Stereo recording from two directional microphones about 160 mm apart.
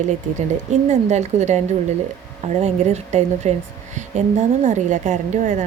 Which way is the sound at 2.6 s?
45° right (ahead or behind).